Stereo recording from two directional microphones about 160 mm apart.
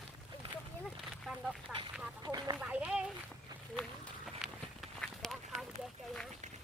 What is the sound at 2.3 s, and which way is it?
Speech, 25° right (ahead or behind).